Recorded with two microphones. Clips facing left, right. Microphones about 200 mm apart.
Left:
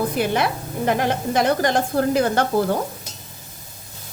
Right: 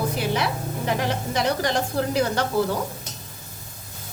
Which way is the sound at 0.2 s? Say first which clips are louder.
Left 4 dB; 55° left (ahead or behind).